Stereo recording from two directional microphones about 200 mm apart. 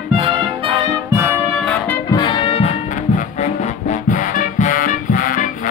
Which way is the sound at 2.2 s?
25° left (ahead or behind).